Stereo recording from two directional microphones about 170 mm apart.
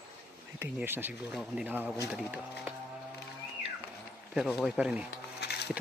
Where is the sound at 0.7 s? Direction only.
10° right (ahead or behind).